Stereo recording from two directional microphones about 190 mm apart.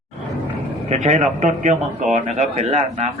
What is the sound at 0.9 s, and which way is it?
A man's voice, 40° right (ahead or behind).